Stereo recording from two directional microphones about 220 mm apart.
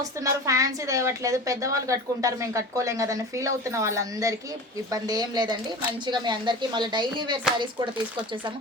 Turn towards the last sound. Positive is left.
turn(degrees=-20)  # may be behind; listen again after turning